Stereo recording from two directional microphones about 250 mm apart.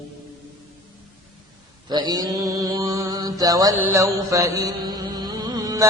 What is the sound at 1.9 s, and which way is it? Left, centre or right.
Mantra, centre.